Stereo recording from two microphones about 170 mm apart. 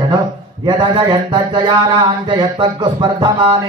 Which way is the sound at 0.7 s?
25° right (ahead or behind).